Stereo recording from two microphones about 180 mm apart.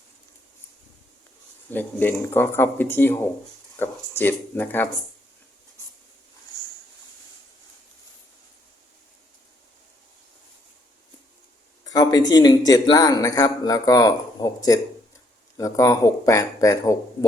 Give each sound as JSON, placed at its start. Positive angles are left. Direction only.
{"t": 1.7, "sound": "speech", "side_deg": 10}
{"t": 11.9, "sound": "a man's voice", "side_deg": 20}